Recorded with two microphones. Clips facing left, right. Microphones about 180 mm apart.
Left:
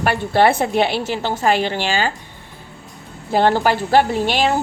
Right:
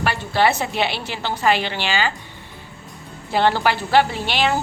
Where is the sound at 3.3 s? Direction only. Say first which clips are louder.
Left 3 dB; 45° left (ahead or behind).